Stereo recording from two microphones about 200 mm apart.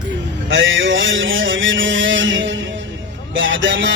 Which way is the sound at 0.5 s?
70° right (ahead or behind).